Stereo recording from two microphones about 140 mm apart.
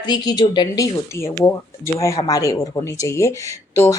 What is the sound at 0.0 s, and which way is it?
Speech, 30° left (ahead or behind).